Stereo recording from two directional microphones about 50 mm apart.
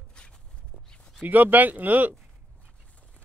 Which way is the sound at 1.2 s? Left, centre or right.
Right.